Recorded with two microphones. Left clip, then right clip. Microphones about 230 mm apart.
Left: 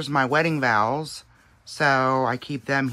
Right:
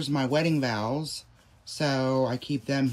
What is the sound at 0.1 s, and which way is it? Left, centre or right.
Speech, centre.